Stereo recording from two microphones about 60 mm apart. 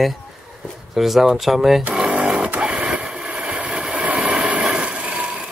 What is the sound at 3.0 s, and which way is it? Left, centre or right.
Vehicle, centre.